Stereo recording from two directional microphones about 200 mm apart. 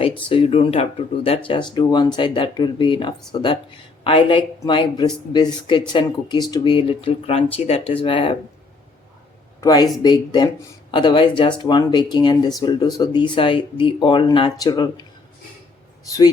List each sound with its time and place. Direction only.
0.3 s speech: 30° left (ahead or behind)
9.6 s speech: 20° left (ahead or behind)
16.0 s speech: 15° left (ahead or behind)